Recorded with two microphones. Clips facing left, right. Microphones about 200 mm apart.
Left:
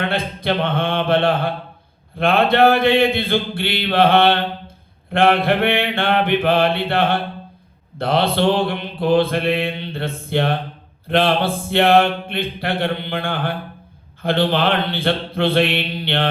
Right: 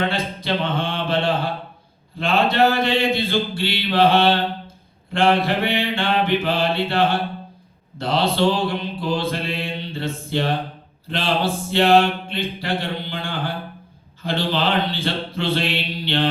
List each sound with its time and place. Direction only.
0.0 s mantra: 55° left (ahead or behind)